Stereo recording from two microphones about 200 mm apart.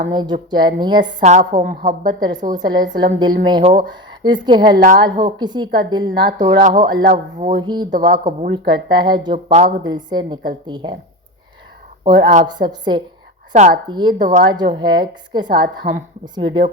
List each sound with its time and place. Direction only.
0.1 s speech: 20° right (ahead or behind)
1.2 s speech: 35° right (ahead or behind)
2.0 s speech: 20° right (ahead or behind)
4.7 s speech: 40° right (ahead or behind)
5.2 s speech: 20° right (ahead or behind)
6.6 s speech: 40° right (ahead or behind)
7.5 s speech: 20° right (ahead or behind)
7.9 s speech: 40° right (ahead or behind)
8.5 s speech: 25° right (ahead or behind)
9.8 s speech: 20° right (ahead or behind)
12.0 s speech: 20° right (ahead or behind)
13.5 s speech: 35° right (ahead or behind)
13.8 s speech: 20° right (ahead or behind)